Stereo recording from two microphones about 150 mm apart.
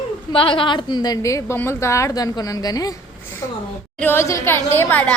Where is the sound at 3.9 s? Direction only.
15° left (ahead or behind).